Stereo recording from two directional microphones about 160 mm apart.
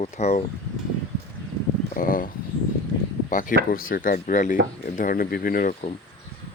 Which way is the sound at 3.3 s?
55° left (ahead or behind).